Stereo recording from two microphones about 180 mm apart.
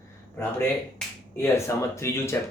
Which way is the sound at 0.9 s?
15° left (ahead or behind).